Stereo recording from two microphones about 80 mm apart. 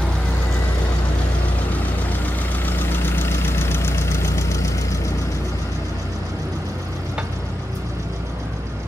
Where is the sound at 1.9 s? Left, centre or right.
Left.